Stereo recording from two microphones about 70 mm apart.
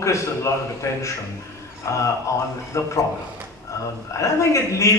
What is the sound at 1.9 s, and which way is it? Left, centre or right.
A man's voice, left.